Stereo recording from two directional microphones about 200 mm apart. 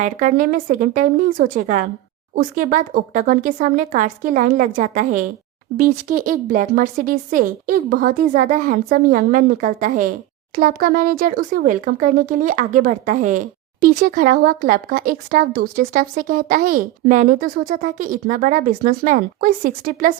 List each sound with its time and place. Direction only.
0.0 s speech: 40° right (ahead or behind)